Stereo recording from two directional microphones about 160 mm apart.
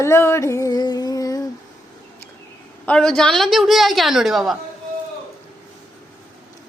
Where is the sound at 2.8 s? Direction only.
5° left (ahead or behind).